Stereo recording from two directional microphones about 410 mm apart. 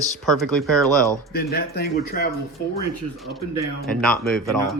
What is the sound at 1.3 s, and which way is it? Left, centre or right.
Speech, left.